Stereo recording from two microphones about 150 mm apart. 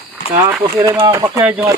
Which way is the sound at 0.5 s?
15° right (ahead or behind).